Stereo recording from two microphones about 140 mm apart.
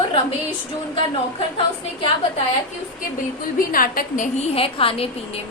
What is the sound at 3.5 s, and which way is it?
A woman's voice, 90° left.